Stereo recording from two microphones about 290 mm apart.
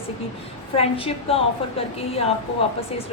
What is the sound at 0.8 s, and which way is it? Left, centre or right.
Speech, centre.